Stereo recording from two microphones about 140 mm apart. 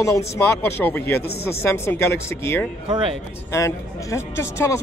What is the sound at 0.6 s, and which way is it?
A man's voice, 15° left (ahead or behind).